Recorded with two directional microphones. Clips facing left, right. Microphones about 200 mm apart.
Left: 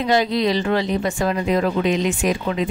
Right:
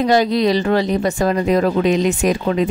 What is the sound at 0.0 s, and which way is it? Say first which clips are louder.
Speech: right 4 dB; 40° right (ahead or behind).